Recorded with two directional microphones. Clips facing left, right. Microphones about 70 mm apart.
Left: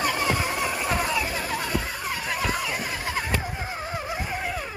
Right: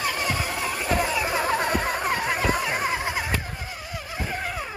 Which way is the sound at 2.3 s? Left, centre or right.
Right.